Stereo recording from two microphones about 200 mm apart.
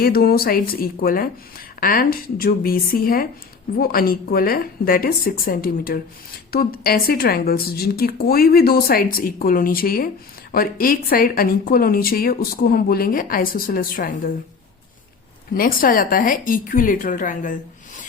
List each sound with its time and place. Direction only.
0.0 s speech: 50° left (ahead or behind)
15.5 s speech: 45° left (ahead or behind)